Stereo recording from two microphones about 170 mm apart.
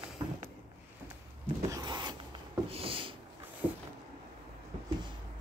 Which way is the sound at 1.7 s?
25° right (ahead or behind).